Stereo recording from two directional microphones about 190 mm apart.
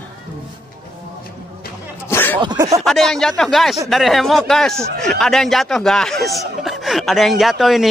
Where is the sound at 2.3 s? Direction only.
25° right (ahead or behind).